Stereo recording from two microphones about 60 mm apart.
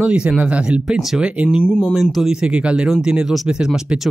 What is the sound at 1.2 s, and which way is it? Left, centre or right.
Speech, centre.